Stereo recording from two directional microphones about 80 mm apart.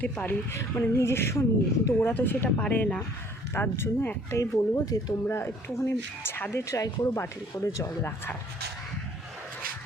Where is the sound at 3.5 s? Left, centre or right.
Left.